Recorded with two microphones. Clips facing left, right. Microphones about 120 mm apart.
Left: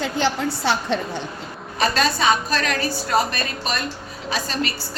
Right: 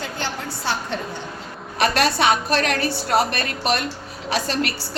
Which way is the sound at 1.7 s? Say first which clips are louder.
Right 1 dB; 70° right (ahead or behind).